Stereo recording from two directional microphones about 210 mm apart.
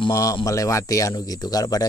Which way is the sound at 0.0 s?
15° left (ahead or behind).